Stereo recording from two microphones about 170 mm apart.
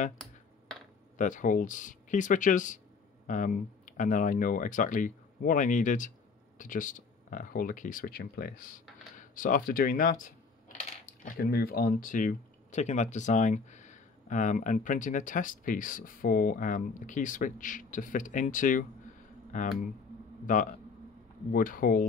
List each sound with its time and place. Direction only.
1.1 s speech: 50° left (ahead or behind)